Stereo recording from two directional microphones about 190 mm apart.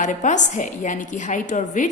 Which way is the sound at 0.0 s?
40° left (ahead or behind).